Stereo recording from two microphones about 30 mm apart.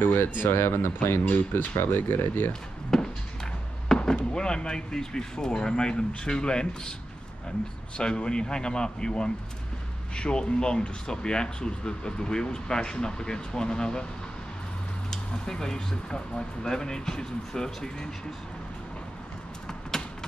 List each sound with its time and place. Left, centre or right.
0.0 s speech: left
0.9 s speech: left
2.9 s a sound: centre
3.9 s speech: left
8.0 s speech: left
15.0 s speech: centre
19.9 s a sound: centre